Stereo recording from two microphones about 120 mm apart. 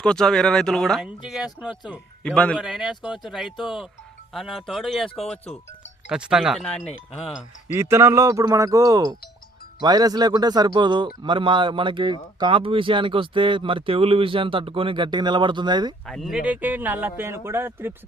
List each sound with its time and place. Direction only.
0.0 s speech: 5° left (ahead or behind)
2.2 s a man's voice: 10° left (ahead or behind)
2.6 s speech: 5° right (ahead or behind)
7.7 s a man's voice: 20° right (ahead or behind); by 16.0 s 35° right (ahead or behind)
16.0 s speech: centre (ahead or behind)
16.4 s speech: 10° right (ahead or behind)